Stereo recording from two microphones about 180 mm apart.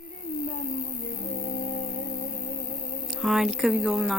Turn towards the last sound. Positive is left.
turn(degrees=0)  # may be behind; listen again after turning